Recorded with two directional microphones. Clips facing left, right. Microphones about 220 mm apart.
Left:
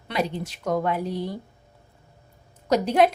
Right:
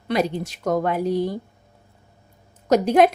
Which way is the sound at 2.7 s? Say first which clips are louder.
Right 4 dB; 50° right (ahead or behind).